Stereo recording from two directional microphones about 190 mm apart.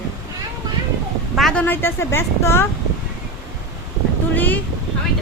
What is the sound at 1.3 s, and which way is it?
A woman's voice, 5° left (ahead or behind).